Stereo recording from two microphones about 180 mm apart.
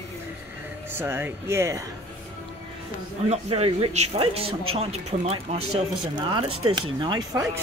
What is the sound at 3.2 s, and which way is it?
A man's voice, 35° right (ahead or behind).